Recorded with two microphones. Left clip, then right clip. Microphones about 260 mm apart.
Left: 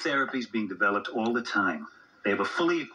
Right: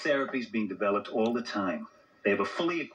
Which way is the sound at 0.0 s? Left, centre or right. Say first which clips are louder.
Left 1 dB; centre.